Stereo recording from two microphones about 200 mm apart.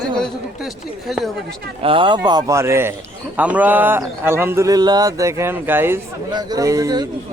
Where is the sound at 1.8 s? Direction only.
25° right (ahead or behind).